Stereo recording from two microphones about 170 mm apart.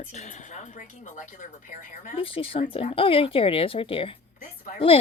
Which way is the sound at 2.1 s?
35° left (ahead or behind).